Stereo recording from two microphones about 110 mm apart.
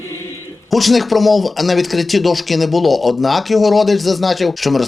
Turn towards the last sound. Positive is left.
turn(degrees=0)  # may be behind; listen again after turning